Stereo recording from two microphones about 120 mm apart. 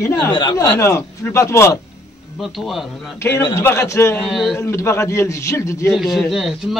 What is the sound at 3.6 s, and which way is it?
Speech, 25° left (ahead or behind).